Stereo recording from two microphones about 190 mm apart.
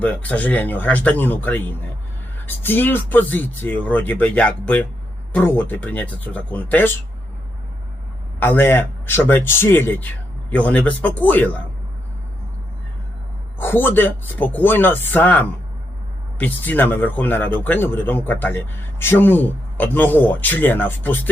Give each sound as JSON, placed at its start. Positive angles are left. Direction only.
{"t": 0.0, "sound": "speech", "side_deg": 10}
{"t": 8.4, "sound": "speech", "side_deg": 10}
{"t": 13.6, "sound": "speech", "side_deg": 10}